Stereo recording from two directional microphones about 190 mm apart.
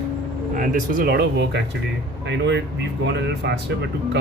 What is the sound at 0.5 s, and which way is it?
Speech, 45° right (ahead or behind).